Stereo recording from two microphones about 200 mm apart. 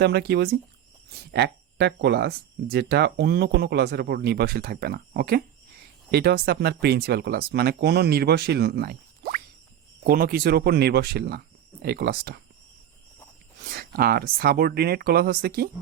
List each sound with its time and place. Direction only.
0.0 s speech: 55° right (ahead or behind)
13.7 s speech: 50° right (ahead or behind)